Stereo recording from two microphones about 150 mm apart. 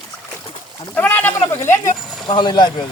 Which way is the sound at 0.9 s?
10° left (ahead or behind).